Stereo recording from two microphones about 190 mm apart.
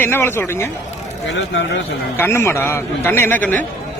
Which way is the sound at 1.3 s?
65° left (ahead or behind).